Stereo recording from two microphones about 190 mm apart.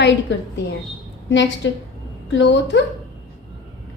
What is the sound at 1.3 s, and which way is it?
A woman's voice, 70° left (ahead or behind).